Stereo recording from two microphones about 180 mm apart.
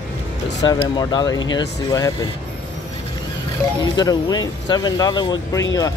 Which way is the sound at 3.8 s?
20° left (ahead or behind).